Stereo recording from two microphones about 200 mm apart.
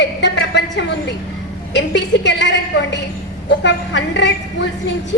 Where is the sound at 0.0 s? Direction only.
60° left (ahead or behind).